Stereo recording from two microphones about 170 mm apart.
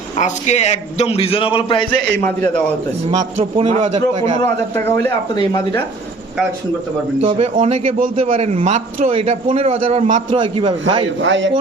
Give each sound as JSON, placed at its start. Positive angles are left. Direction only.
{"t": 0.2, "sound": "a man's voice", "side_deg": 40}
{"t": 3.1, "sound": "a man's voice", "side_deg": -40}
{"t": 5.3, "sound": "speech", "side_deg": 25}
{"t": 7.2, "sound": "a man's voice", "side_deg": -35}
{"t": 7.5, "sound": "a man's voice", "side_deg": -50}
{"t": 10.3, "sound": "a man's voice", "side_deg": -30}
{"t": 11.3, "sound": "a man's voice", "side_deg": -90}